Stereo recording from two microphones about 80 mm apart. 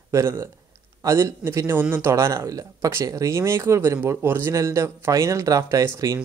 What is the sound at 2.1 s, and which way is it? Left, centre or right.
Speech, right.